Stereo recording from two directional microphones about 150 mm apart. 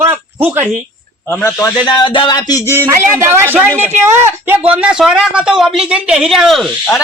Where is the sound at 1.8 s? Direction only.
30° left (ahead or behind).